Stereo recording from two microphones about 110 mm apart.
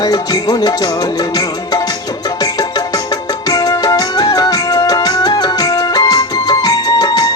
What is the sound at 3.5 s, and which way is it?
Music, 35° left (ahead or behind).